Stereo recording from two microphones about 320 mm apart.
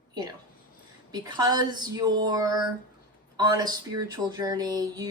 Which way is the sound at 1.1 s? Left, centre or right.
Centre.